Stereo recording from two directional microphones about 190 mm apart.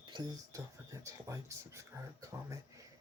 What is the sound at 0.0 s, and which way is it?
Speech, 25° right (ahead or behind).